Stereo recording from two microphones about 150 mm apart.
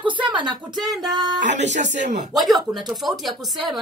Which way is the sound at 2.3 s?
Centre (ahead or behind).